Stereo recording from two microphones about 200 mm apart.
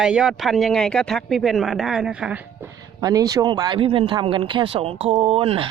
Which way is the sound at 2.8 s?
20° right (ahead or behind).